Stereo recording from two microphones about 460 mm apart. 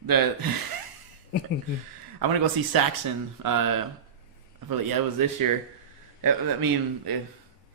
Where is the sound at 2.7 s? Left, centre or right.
Right.